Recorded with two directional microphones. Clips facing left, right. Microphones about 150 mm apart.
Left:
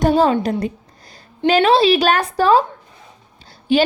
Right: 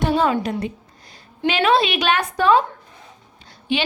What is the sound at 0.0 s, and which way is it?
A woman's voice, 35° left (ahead or behind).